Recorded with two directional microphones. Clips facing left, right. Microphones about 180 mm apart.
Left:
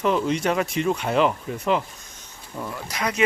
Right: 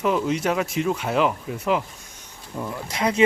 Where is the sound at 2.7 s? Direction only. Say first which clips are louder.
Right 4 dB; 25° right (ahead or behind).